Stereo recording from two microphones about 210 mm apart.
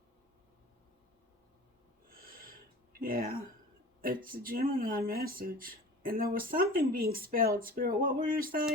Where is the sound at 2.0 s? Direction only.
45° right (ahead or behind).